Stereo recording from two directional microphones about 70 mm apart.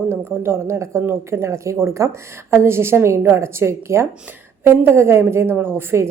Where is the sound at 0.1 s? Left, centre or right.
Right.